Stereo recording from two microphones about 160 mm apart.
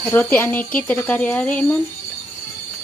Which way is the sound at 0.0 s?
10° left (ahead or behind).